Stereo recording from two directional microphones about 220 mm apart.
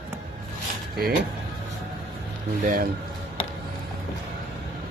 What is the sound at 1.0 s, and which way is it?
Speech, 45° right (ahead or behind).